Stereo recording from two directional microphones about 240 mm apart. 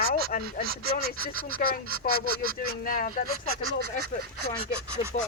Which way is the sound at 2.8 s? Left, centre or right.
Left.